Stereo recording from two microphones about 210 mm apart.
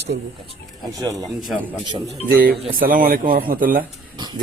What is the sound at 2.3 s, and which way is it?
Speech, 45° right (ahead or behind).